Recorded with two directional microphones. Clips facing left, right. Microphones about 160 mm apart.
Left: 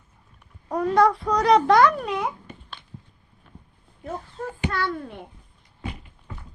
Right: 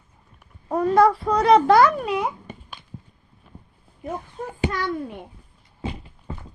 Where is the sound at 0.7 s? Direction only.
Centre (ahead or behind).